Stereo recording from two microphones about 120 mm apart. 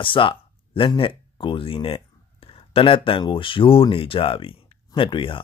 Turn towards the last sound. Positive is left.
turn(degrees=45)  # may be behind; listen again after turning